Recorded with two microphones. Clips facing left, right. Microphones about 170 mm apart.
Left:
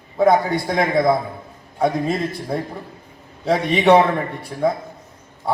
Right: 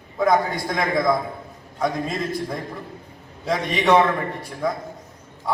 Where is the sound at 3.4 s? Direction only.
30° left (ahead or behind).